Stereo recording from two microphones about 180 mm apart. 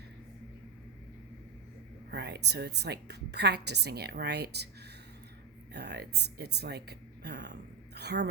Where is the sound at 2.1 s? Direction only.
70° right (ahead or behind).